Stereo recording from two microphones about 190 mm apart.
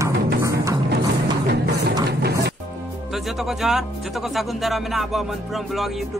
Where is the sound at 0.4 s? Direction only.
15° right (ahead or behind).